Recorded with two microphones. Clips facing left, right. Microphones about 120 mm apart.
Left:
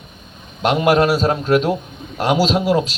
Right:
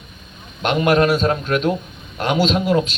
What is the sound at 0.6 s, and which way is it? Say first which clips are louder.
Speech: left 1 dB; 30° left (ahead or behind).